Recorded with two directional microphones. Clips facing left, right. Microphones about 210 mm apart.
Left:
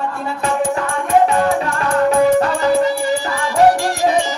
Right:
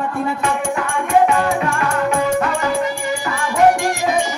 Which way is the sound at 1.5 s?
35° left (ahead or behind).